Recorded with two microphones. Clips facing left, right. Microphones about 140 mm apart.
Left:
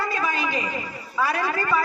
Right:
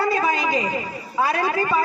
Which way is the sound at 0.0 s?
30° right (ahead or behind).